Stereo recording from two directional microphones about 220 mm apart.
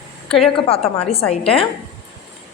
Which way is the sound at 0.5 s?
25° left (ahead or behind).